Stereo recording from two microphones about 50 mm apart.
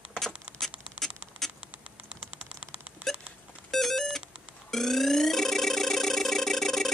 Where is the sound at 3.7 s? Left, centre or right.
Centre.